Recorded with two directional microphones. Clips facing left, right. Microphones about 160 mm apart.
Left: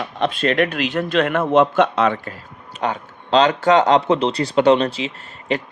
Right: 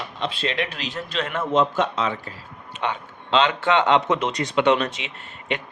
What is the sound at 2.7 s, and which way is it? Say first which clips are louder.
Speech: left 4 dB; 40° left (ahead or behind).